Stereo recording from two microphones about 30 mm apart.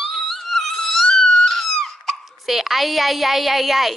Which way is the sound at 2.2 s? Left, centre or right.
Centre.